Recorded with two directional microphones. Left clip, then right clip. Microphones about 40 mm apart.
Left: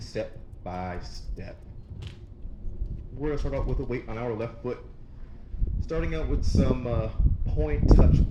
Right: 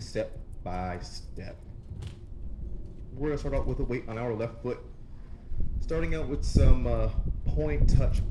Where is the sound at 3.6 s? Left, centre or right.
Centre.